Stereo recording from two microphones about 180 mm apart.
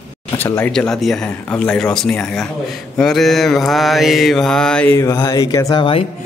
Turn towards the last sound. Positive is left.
turn(degrees=30)  # may be behind; listen again after turning